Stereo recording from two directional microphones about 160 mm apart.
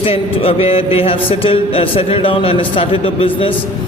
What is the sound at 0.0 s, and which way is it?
Speech, 35° left (ahead or behind).